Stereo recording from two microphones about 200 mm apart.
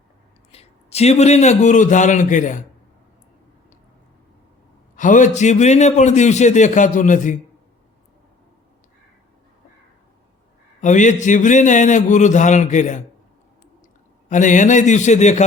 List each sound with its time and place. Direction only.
0.5 s a man's voice: 30° left (ahead or behind)
4.9 s a man's voice: 40° left (ahead or behind)
10.8 s a man's voice: 35° left (ahead or behind)
14.3 s a man's voice: 40° left (ahead or behind)